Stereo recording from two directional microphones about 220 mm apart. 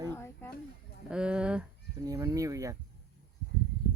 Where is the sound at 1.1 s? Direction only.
5° right (ahead or behind).